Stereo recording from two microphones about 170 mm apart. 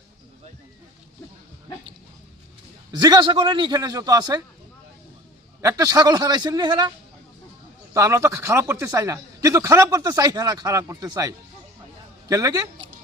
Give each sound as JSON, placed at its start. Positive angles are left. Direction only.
{"t": 2.9, "sound": "speech", "side_deg": -25}
{"t": 5.6, "sound": "speech", "side_deg": -20}
{"t": 7.9, "sound": "speech", "side_deg": -15}